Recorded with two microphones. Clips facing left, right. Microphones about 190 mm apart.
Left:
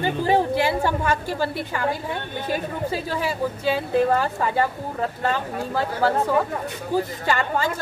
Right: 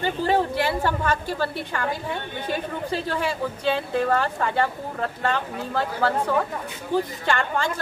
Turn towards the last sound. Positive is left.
turn(degrees=5)  # may be behind; listen again after turning